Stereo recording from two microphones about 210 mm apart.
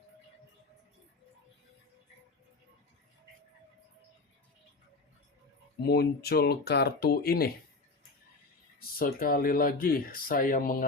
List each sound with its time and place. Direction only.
5.8 s speech: 50° left (ahead or behind)
9.0 s speech: 45° left (ahead or behind)